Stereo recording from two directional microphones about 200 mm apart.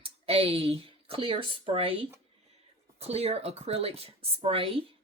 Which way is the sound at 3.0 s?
30° right (ahead or behind).